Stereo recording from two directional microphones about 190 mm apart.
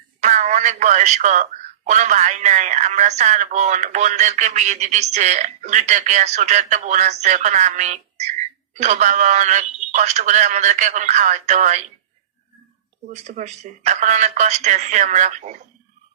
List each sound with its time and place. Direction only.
0.2 s speech: 40° right (ahead or behind)
13.1 s speech: 40° right (ahead or behind)